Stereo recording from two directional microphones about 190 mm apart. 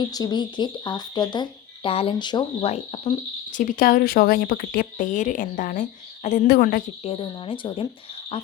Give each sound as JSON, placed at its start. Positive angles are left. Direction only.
{"t": 0.1, "sound": "speech", "side_deg": 20}
{"t": 3.5, "sound": "speech", "side_deg": 45}
{"t": 7.0, "sound": "speech", "side_deg": 30}